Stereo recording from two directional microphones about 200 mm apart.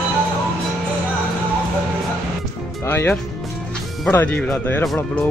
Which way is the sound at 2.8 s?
10° left (ahead or behind).